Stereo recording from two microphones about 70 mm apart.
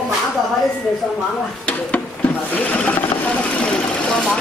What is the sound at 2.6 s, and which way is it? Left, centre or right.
Sewing machine, left.